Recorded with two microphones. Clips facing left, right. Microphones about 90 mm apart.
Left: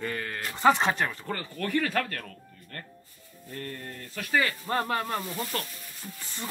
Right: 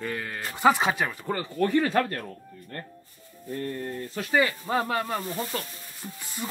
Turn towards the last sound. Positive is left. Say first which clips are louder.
# right 2 dB
turn(degrees=-15)  # may be behind; listen again after turning